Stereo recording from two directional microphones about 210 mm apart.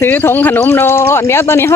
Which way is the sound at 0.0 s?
10° left (ahead or behind).